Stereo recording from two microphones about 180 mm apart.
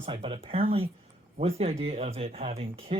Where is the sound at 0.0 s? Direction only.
30° right (ahead or behind).